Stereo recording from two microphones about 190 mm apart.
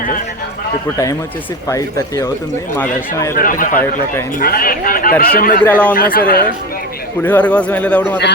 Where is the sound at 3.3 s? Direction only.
45° left (ahead or behind).